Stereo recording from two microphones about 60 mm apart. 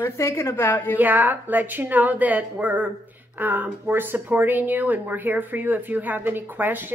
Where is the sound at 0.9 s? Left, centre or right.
Right.